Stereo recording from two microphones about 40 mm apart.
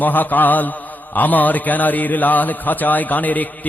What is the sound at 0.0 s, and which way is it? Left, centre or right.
A man's voice, left.